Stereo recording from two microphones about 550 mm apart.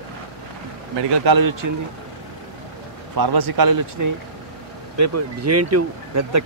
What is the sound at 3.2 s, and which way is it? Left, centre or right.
Speech, right.